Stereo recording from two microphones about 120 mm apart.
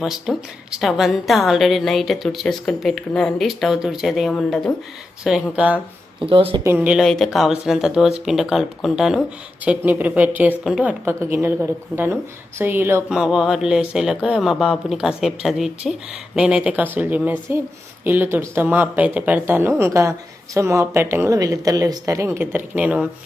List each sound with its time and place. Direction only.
0.0 s a woman's voice: 5° right (ahead or behind)
5.2 s speech: 5° right (ahead or behind)
6.2 s speech: 50° right (ahead or behind)
6.7 s speech: 10° right (ahead or behind)
7.0 s a woman's voice: centre (ahead or behind)
9.6 s speech: 15° right (ahead or behind)
11.0 s speech: 20° right (ahead or behind)
13.1 s a woman's voice: 5° right (ahead or behind)